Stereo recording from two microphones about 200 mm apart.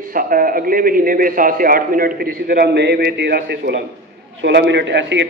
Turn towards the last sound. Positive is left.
turn(degrees=-60)  # may be behind; listen again after turning